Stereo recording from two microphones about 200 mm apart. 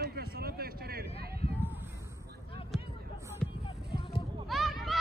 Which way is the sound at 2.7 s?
Centre (ahead or behind).